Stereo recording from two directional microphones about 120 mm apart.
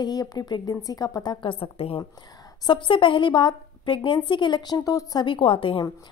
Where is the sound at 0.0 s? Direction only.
35° left (ahead or behind); by 2.0 s 55° left (ahead or behind).